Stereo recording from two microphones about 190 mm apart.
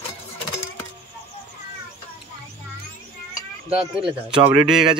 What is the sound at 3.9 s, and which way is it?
Speech, 30° right (ahead or behind).